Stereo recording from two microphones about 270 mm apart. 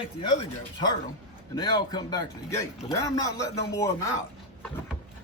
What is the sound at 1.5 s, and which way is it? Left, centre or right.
A man's voice, centre.